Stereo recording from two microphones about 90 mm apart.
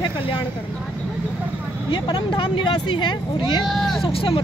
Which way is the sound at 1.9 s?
50° left (ahead or behind).